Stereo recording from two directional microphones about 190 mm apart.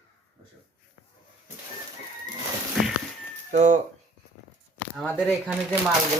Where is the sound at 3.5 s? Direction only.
40° right (ahead or behind).